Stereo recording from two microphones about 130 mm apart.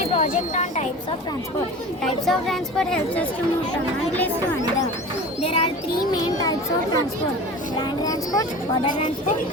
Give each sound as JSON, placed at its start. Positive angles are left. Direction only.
{"t": 0.2, "sound": "speech", "side_deg": 65}
{"t": 2.2, "sound": "a woman's voice", "side_deg": 0}
{"t": 5.4, "sound": "a child's voice", "side_deg": 45}
{"t": 6.1, "sound": "a child's voice", "side_deg": 30}